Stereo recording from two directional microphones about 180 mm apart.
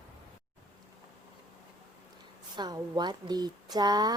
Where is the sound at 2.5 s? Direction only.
25° right (ahead or behind).